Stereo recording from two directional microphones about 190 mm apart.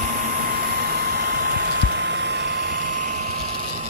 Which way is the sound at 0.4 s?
50° right (ahead or behind).